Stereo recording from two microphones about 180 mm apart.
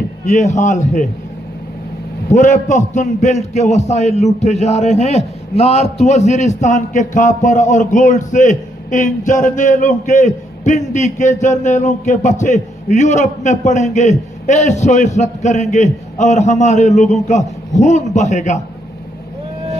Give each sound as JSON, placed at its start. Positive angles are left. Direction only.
{"t": 0.2, "sound": "a man's voice", "side_deg": 40}
{"t": 2.3, "sound": "a man's voice", "side_deg": 45}